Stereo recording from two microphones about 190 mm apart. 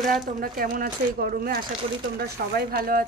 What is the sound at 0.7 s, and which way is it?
Speech, 45° right (ahead or behind).